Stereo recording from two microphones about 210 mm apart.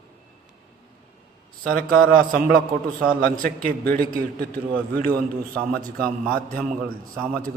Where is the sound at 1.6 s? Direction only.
45° right (ahead or behind).